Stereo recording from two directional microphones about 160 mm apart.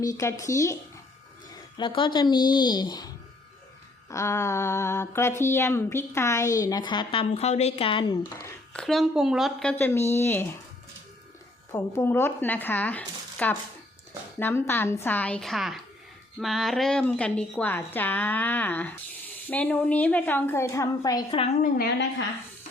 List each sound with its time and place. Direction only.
0.0 s a woman's voice: 20° left (ahead or behind)
1.8 s a woman's voice: 30° left (ahead or behind)
4.1 s mantra: 15° left (ahead or behind); by 8.2 s 35° left (ahead or behind)
8.7 s a woman's voice: centre (ahead or behind)
9.7 s mantra: 15° left (ahead or behind)
11.7 s mantra: 15° left (ahead or behind)
15.0 s a woman's voice: 10° left (ahead or behind)
16.4 s mantra: centre (ahead or behind); by 21.3 s 25° left (ahead or behind)
21.6 s a woman's voice: 75° left (ahead or behind)